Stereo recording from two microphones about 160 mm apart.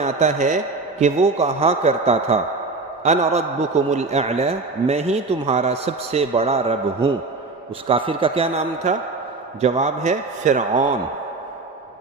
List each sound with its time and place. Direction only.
0.0 s a man's voice: 45° right (ahead or behind)